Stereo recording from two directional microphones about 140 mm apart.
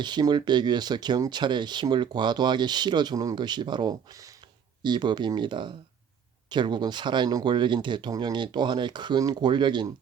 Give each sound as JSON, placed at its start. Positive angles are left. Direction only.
{"t": 0.0, "sound": "speech", "side_deg": -30}